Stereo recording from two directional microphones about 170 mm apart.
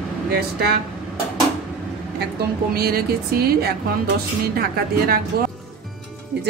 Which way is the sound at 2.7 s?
65° right (ahead or behind).